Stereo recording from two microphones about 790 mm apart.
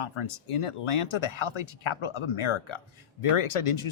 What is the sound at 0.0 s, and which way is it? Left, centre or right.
Speech, left.